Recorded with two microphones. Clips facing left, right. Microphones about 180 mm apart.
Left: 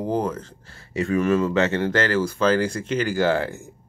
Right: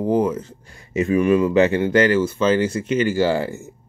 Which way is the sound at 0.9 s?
20° right (ahead or behind).